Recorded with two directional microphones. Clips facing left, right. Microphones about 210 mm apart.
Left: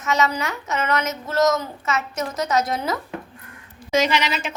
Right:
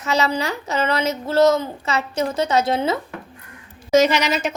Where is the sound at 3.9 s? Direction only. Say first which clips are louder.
Right 5 dB; 45° right (ahead or behind).